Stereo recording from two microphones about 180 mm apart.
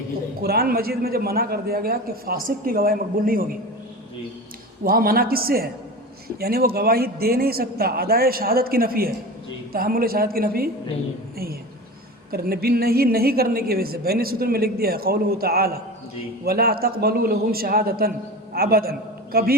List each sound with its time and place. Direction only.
0.4 s a woman's voice: 60° right (ahead or behind)
4.8 s a woman's voice: 55° right (ahead or behind)
12.3 s a woman's voice: 60° right (ahead or behind)